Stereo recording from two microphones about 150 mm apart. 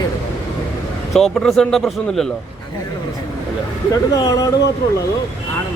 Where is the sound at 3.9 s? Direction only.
25° left (ahead or behind).